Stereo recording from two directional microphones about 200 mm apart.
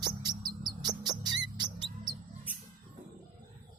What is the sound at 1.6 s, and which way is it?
Mouse, 20° right (ahead or behind).